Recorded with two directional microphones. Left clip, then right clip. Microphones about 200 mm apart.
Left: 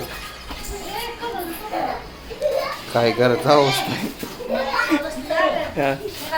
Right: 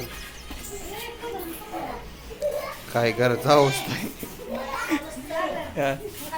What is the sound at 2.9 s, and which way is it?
Speech, centre (ahead or behind).